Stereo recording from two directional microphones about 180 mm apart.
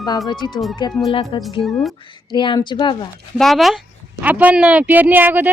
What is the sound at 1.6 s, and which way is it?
Speech, centre (ahead or behind).